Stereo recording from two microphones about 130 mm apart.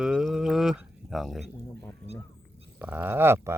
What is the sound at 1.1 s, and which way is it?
Bird, centre (ahead or behind).